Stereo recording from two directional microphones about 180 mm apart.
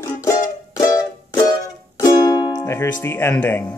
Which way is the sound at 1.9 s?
20° left (ahead or behind).